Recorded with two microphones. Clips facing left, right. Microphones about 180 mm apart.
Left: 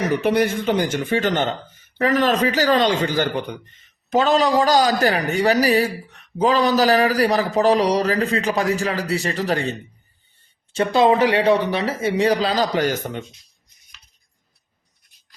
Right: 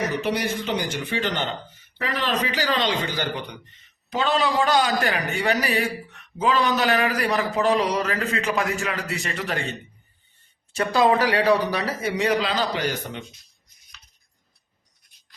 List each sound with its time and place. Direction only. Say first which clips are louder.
0.2 s a man's voice: left 6 dB; 50° left (ahead or behind); by 9.7 s 35° left (ahead or behind)
10.7 s speech: left 3 dB; 25° left (ahead or behind); by 13.2 s 45° left (ahead or behind)